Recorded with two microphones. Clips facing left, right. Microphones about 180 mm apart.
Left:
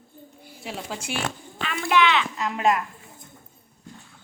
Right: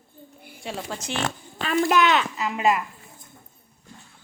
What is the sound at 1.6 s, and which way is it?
Speech, 40° right (ahead or behind).